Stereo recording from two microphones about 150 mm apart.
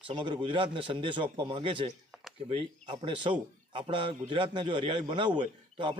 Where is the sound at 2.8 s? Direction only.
35° right (ahead or behind).